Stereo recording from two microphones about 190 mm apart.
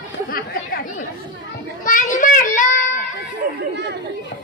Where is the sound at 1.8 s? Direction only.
45° left (ahead or behind).